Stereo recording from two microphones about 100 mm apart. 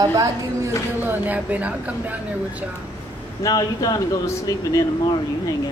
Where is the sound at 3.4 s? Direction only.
40° left (ahead or behind).